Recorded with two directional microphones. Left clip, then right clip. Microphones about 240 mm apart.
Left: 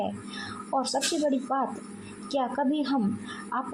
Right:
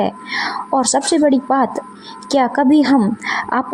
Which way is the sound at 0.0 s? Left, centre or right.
Right.